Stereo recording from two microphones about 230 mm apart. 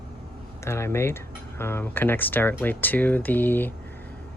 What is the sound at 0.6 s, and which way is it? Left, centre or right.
Speech, centre.